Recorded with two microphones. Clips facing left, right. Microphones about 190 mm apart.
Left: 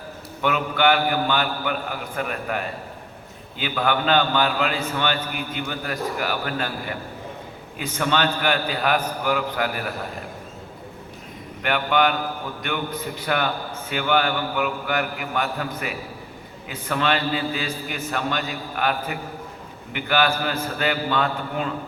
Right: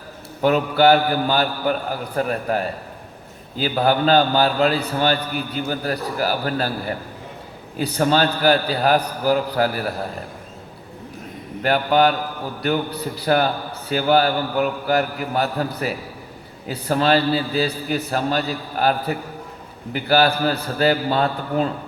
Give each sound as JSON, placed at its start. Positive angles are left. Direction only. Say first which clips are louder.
{"t": 0.4, "sound": "a man's voice", "louder": "right 5 dB", "side_deg": -35}
{"t": 11.6, "sound": "a man's voice", "louder": "right 4 dB", "side_deg": -35}